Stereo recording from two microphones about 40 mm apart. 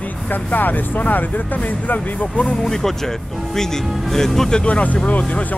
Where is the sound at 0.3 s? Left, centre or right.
Left.